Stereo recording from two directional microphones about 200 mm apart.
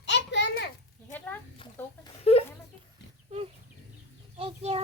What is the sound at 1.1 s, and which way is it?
Chicken, 10° left (ahead or behind).